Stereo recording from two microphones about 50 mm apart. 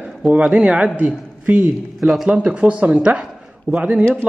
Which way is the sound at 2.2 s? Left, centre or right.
Right.